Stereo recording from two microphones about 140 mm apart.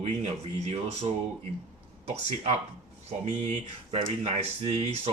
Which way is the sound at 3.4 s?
45° right (ahead or behind).